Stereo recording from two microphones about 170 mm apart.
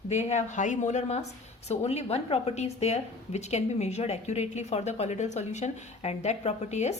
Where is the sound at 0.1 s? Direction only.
40° left (ahead or behind).